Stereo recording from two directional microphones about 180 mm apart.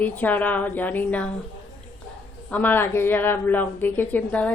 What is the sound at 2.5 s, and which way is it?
A woman's voice, 10° left (ahead or behind).